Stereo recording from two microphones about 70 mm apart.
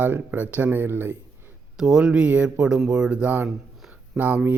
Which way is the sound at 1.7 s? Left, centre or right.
Centre.